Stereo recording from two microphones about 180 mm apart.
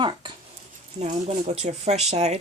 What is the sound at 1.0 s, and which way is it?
Speech, 35° right (ahead or behind).